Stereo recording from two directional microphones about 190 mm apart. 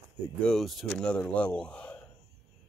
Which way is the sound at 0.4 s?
5° left (ahead or behind).